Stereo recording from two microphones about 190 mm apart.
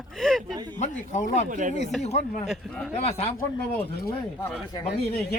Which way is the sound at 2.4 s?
5° left (ahead or behind).